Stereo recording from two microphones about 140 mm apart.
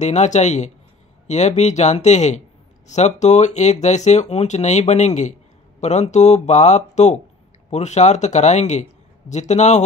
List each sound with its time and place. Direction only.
0.0 s speech: 55° left (ahead or behind)